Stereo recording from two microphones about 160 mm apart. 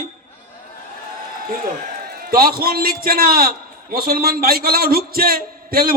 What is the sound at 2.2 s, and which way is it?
A man's voice, 70° right (ahead or behind).